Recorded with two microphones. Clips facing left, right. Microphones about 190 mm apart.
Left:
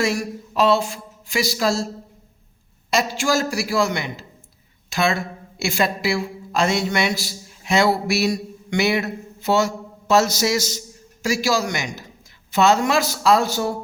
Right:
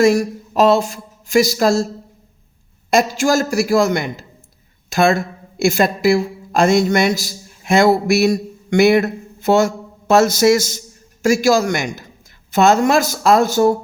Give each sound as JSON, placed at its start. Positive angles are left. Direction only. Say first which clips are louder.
{"t": 0.0, "sound": "speech", "louder": "right 9 dB", "side_deg": -45}
{"t": 2.9, "sound": "a woman's voice", "louder": "right 6 dB", "side_deg": -45}